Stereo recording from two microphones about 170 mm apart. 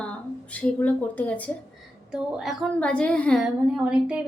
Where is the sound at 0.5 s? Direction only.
10° left (ahead or behind).